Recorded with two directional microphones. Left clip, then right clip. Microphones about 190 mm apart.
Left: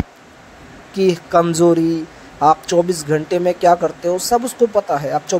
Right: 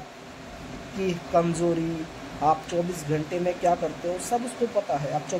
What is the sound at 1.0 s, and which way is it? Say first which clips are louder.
Speech: left 10 dB; 30° left (ahead or behind).